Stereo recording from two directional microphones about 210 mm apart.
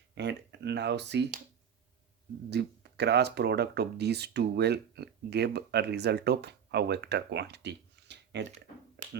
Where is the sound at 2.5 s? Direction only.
50° right (ahead or behind).